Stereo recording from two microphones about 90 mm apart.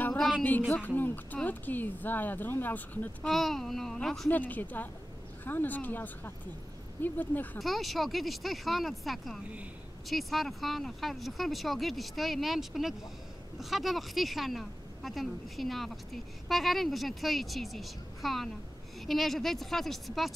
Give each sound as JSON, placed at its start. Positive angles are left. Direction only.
{"t": 0.4, "sound": "a woman's voice", "side_deg": 20}
{"t": 3.3, "sound": "speech", "side_deg": 5}
{"t": 4.3, "sound": "a woman's voice", "side_deg": 20}
{"t": 7.5, "sound": "speech", "side_deg": 0}